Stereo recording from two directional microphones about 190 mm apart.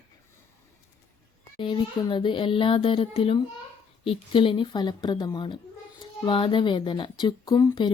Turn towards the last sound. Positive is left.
turn(degrees=25)  # may be behind; listen again after turning